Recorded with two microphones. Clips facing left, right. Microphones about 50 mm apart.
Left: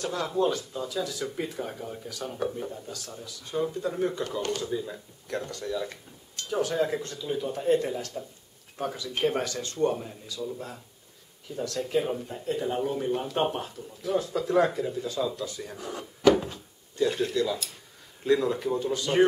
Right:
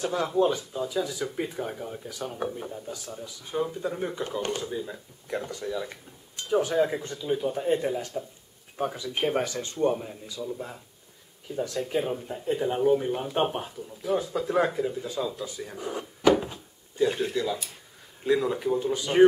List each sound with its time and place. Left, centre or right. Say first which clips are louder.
0.0 s speech: right 2 dB; centre
4.6 s speech: left 1 dB; centre
11.4 s speech: right 2 dB; centre